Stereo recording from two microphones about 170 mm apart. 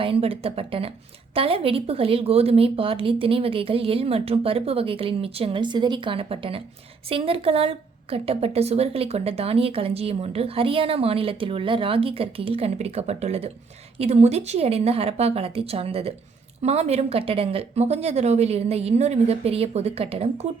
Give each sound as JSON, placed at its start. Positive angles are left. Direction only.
{"t": 0.0, "sound": "speech", "side_deg": -35}